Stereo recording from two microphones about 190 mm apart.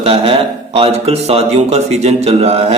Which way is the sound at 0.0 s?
30° right (ahead or behind).